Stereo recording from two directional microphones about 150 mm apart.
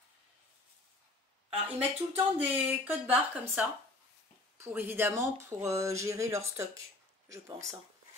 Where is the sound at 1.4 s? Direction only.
10° right (ahead or behind).